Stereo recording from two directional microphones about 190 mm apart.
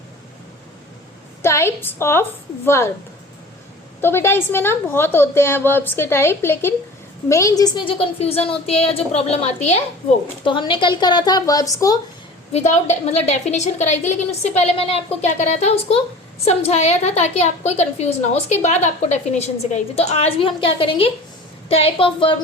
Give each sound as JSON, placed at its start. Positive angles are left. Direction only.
{"t": 1.4, "sound": "a woman's voice", "side_deg": 15}
{"t": 4.0, "sound": "a woman's voice", "side_deg": 10}
{"t": 12.5, "sound": "a woman's voice", "side_deg": 35}